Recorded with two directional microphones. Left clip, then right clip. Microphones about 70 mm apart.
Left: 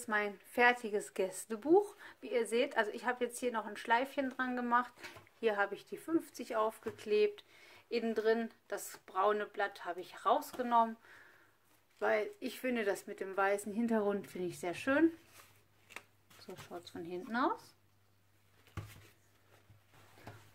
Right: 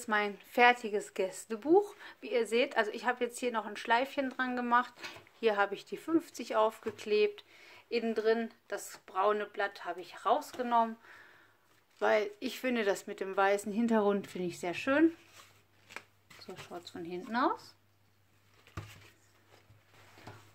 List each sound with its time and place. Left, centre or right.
0.0 s a woman's voice: right
0.8 s speech: centre; by 6.9 s right
7.0 s speech: centre
7.3 s a sound: centre
8.0 s speech: centre
12.0 s a woman's voice: right
14.5 s speech: centre